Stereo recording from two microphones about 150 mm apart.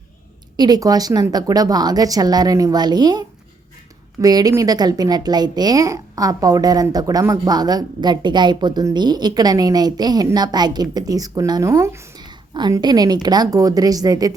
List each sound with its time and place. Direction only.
0.5 s a woman's voice: 25° right (ahead or behind)
12.2 s a woman's voice: 30° right (ahead or behind)